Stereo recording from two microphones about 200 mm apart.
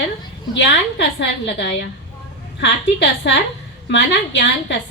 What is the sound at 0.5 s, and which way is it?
A woman's voice, 60° left (ahead or behind).